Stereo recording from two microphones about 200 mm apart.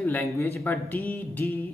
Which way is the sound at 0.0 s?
10° left (ahead or behind).